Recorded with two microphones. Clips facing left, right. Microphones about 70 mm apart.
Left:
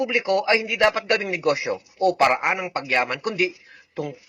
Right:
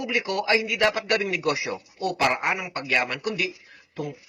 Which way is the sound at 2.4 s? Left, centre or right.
Left.